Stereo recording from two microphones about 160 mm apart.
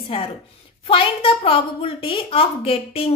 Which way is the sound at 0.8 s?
35° left (ahead or behind).